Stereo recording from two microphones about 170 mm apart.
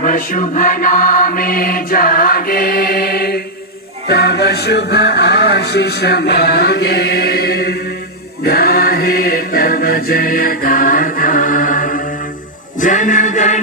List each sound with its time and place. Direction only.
0.0 s music: 55° left (ahead or behind); by 7.8 s 70° left (ahead or behind)
8.4 s chant: 65° left (ahead or behind); by 13.6 s 45° left (ahead or behind)